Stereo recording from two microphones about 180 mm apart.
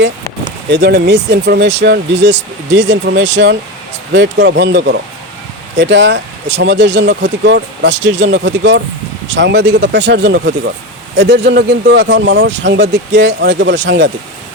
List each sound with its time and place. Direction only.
0.7 s speech: 70° right (ahead or behind); by 3.2 s 90° right
3.3 s speech: 80° right